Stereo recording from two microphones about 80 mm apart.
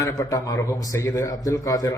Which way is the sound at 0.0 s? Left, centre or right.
Left.